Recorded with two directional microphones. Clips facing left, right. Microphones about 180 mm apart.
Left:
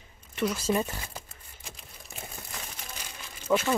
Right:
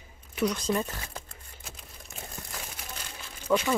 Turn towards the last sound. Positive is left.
turn(degrees=5)  # may be behind; listen again after turning